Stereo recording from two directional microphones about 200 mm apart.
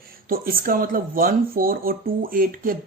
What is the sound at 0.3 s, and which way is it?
Speech, 45° right (ahead or behind).